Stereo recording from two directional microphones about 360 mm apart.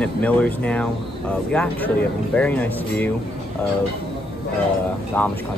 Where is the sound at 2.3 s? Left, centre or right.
Centre.